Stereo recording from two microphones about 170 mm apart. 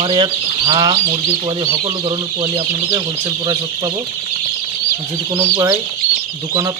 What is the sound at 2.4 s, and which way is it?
Speech, 25° right (ahead or behind).